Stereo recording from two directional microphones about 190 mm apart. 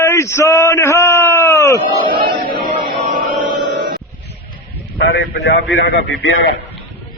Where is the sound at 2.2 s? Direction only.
50° right (ahead or behind).